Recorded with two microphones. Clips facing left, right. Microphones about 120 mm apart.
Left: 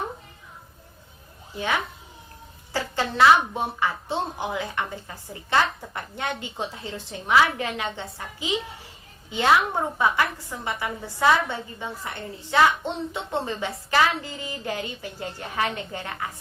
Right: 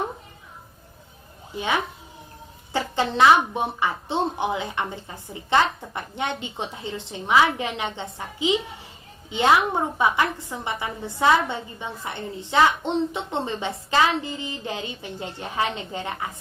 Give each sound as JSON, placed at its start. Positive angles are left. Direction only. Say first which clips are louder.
{"t": 1.5, "sound": "a woman's voice", "louder": "right 2 dB", "side_deg": -20}